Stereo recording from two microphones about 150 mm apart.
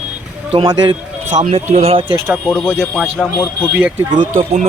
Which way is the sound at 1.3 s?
50° right (ahead or behind).